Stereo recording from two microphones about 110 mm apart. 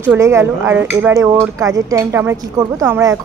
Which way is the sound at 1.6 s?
30° right (ahead or behind).